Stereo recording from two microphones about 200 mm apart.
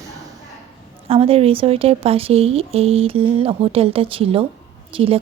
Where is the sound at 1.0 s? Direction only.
30° right (ahead or behind).